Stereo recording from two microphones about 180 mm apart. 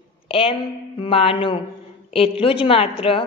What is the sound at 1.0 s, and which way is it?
Music, 30° left (ahead or behind).